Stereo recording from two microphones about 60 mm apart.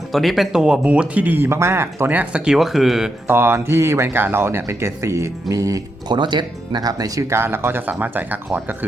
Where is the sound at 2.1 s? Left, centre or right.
Right.